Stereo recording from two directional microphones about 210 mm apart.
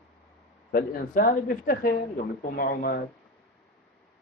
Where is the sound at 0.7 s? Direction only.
40° left (ahead or behind).